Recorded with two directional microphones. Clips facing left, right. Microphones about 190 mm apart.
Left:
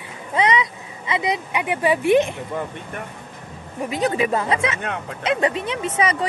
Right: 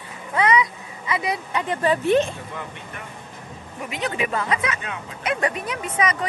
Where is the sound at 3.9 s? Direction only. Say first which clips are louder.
Left 5 dB; 35° left (ahead or behind).